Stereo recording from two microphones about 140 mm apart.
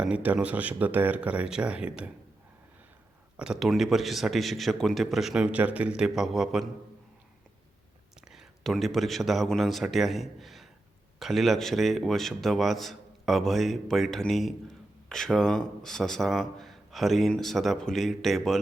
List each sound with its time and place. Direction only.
0.0 s speech: 10° right (ahead or behind)
3.3 s a man's voice: 5° right (ahead or behind)
8.3 s a man's voice: centre (ahead or behind)